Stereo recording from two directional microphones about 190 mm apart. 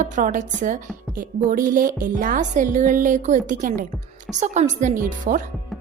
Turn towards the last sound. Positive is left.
turn(degrees=-45)  # may be behind; listen again after turning